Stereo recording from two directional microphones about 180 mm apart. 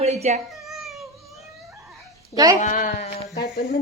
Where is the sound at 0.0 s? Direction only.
40° right (ahead or behind).